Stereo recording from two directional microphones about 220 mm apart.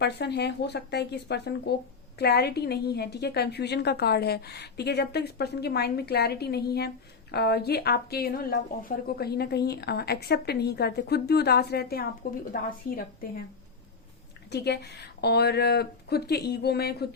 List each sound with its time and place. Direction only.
0.0 s a woman's voice: 50° left (ahead or behind)
14.5 s a woman's voice: 50° left (ahead or behind)